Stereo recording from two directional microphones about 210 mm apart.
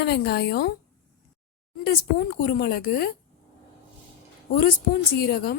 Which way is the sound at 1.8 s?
50° left (ahead or behind).